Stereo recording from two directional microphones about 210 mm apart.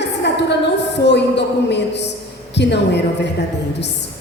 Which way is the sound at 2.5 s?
55° left (ahead or behind).